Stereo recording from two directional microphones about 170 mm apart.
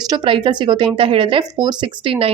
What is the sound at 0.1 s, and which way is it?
Speech, 30° right (ahead or behind).